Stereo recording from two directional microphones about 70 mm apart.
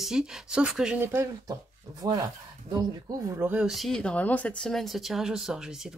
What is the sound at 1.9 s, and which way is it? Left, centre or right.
Speech, right.